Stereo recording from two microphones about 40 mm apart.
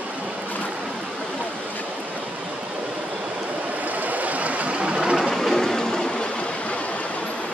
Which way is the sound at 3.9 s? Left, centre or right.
Right.